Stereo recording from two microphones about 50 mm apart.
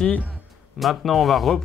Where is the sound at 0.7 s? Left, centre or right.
Centre.